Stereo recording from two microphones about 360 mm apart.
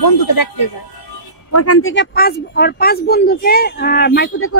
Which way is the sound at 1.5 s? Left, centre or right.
Left.